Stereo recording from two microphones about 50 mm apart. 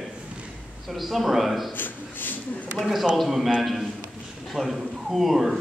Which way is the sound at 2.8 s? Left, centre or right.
Centre.